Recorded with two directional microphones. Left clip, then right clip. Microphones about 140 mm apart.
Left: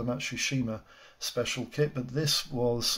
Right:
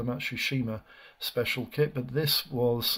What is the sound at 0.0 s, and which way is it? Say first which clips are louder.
Speech: right 1 dB; 30° right (ahead or behind).